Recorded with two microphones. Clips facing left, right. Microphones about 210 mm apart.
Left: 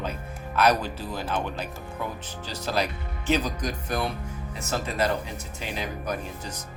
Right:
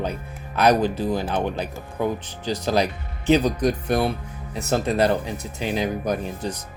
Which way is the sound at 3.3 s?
65° right (ahead or behind).